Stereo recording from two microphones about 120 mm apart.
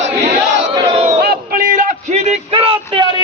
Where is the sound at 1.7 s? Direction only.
80° right.